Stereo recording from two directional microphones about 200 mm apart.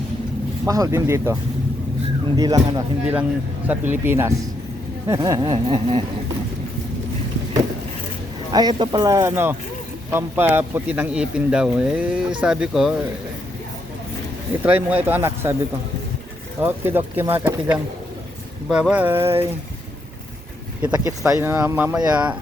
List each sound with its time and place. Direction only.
0.6 s speech: 15° right (ahead or behind)
2.3 s a sound: 20° right (ahead or behind)
3.7 s speech: 10° right (ahead or behind)
5.0 s a sound: 15° right (ahead or behind)
8.5 s speech: 20° right (ahead or behind); by 12.9 s 5° right (ahead or behind)
14.6 s speech: 10° right (ahead or behind)
16.6 s speech: 10° right (ahead or behind)
20.8 s speech: 15° right (ahead or behind)